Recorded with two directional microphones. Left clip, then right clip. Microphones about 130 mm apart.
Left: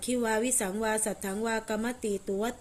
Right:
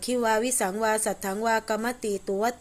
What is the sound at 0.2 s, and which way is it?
A woman's voice, 20° left (ahead or behind).